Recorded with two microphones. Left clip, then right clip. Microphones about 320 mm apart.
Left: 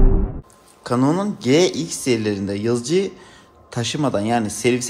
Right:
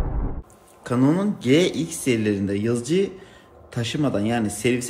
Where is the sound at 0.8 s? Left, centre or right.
Centre.